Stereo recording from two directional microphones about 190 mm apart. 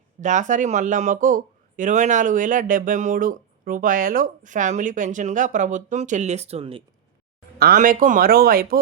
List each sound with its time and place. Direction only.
0.2 s speech: 40° right (ahead or behind)
7.6 s speech: 45° right (ahead or behind)